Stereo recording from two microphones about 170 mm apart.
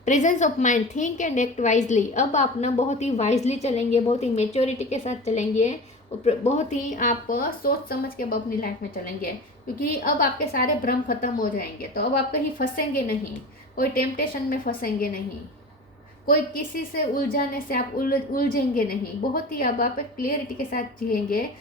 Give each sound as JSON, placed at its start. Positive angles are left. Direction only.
{"t": 0.0, "sound": "a woman's voice", "side_deg": 45}
{"t": 9.7, "sound": "a woman's voice", "side_deg": 55}
{"t": 16.2, "sound": "a woman's voice", "side_deg": 55}